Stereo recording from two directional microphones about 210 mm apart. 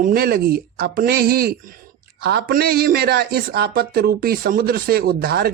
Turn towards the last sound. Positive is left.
turn(degrees=-45)  # may be behind; listen again after turning